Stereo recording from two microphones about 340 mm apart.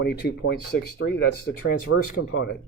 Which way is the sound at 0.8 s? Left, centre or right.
Left.